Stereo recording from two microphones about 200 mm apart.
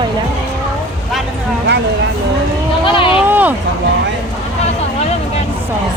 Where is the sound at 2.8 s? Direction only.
25° left (ahead or behind).